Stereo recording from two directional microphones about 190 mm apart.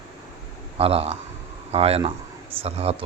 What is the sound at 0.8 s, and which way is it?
Speech, 30° right (ahead or behind).